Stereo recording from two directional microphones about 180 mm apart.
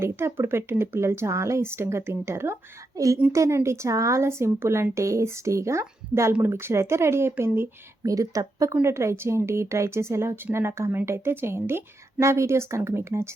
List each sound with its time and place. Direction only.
0.0 s speech: 15° right (ahead or behind)